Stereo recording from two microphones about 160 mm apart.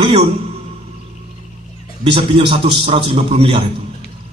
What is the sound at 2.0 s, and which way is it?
A man's voice, 35° right (ahead or behind).